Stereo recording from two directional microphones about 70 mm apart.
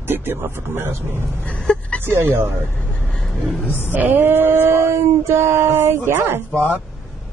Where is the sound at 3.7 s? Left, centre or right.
Left.